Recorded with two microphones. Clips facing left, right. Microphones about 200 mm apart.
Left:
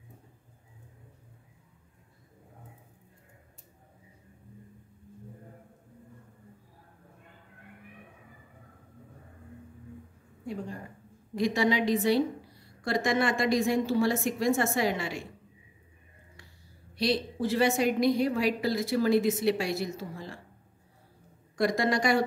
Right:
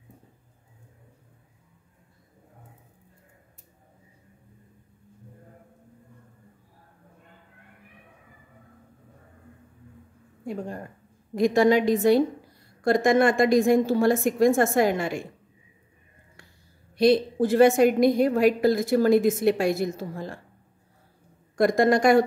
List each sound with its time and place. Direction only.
10.4 s a woman's voice: 50° right (ahead or behind)
16.9 s a woman's voice: 50° right (ahead or behind)
21.5 s a woman's voice: 50° right (ahead or behind)